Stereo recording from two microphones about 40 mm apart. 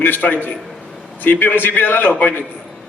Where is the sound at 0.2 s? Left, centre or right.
Left.